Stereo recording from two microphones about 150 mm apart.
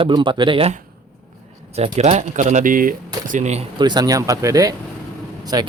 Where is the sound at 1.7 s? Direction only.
45° right (ahead or behind); by 2.9 s 65° right (ahead or behind).